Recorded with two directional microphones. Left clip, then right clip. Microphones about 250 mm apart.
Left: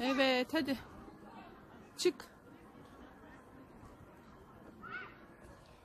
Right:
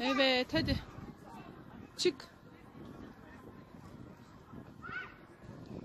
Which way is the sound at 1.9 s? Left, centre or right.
Centre.